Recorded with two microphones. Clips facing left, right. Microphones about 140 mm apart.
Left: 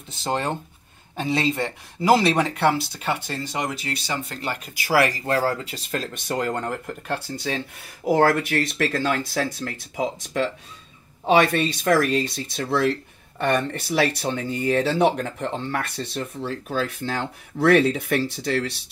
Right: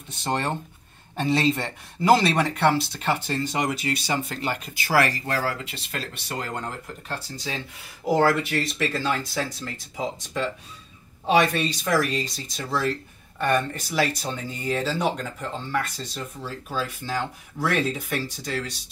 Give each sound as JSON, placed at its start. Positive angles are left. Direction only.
{"t": 0.3, "sound": "speech", "side_deg": 15}
{"t": 3.6, "sound": "speech", "side_deg": -5}
{"t": 4.8, "sound": "speech", "side_deg": 15}
{"t": 6.3, "sound": "speech", "side_deg": 65}
{"t": 11.5, "sound": "speech", "side_deg": 55}